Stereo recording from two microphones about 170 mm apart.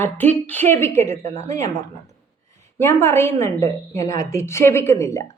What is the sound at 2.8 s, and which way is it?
A woman's voice, 15° left (ahead or behind).